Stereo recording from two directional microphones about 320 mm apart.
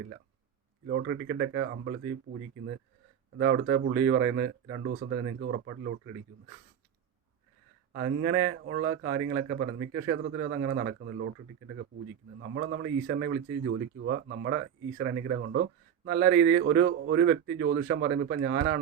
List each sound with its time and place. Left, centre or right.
0.9 s a man's voice: right
3.3 s a man's voice: right
7.9 s a man's voice: right
12.4 s a man's voice: right